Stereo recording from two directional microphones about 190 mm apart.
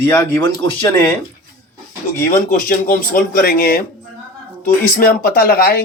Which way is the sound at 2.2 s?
45° left (ahead or behind).